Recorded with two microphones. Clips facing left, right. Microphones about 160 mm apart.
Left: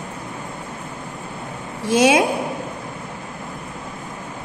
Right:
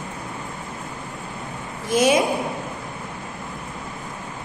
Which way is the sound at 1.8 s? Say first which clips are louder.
Left 3 dB; 85° left.